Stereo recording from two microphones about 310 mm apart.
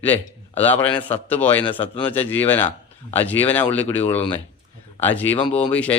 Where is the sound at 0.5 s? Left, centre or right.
Centre.